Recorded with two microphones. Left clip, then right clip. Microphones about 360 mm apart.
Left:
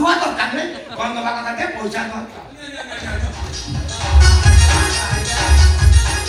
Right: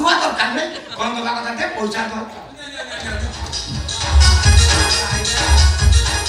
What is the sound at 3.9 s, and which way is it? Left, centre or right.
Music, centre.